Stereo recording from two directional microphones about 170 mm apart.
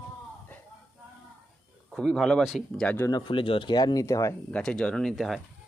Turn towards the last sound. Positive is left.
turn(degrees=0)  # may be behind; listen again after turning